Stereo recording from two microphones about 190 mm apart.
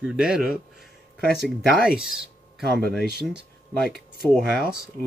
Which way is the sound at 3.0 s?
55° right (ahead or behind).